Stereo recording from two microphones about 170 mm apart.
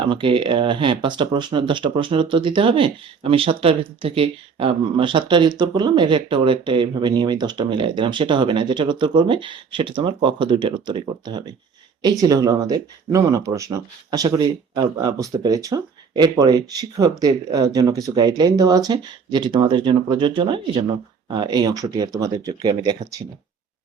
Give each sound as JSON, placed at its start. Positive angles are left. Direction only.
{"t": 0.1, "sound": "speech", "side_deg": -30}